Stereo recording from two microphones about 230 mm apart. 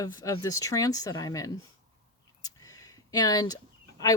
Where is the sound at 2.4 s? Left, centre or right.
Centre.